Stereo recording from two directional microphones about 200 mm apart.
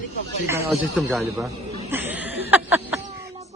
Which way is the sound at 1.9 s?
10° right (ahead or behind).